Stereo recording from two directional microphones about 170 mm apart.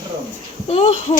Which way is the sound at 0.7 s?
40° left (ahead or behind).